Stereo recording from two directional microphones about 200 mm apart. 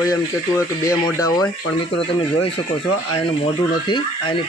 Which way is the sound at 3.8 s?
25° left (ahead or behind).